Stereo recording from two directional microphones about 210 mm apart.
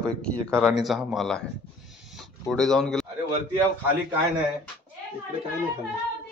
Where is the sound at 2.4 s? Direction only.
Centre (ahead or behind).